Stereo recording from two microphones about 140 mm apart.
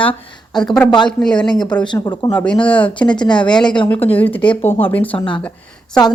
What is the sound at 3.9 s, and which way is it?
Speech, 10° left (ahead or behind).